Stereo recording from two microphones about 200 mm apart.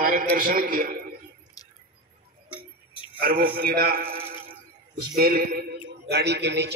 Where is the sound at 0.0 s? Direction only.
45° right (ahead or behind).